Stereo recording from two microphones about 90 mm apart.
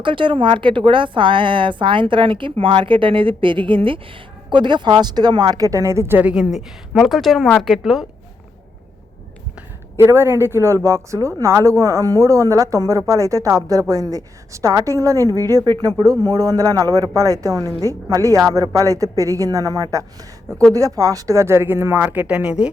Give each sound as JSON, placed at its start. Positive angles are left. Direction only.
{"t": 0.0, "sound": "a woman's voice", "side_deg": -70}
{"t": 4.4, "sound": "speech", "side_deg": -60}
{"t": 6.3, "sound": "a woman's voice", "side_deg": -10}
{"t": 10.0, "sound": "speech", "side_deg": -30}
{"t": 15.6, "sound": "speech", "side_deg": -50}
{"t": 22.0, "sound": "speech", "side_deg": -15}